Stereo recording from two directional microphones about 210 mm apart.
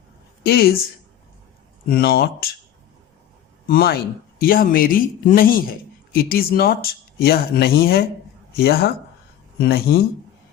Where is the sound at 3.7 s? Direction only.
45° left (ahead or behind).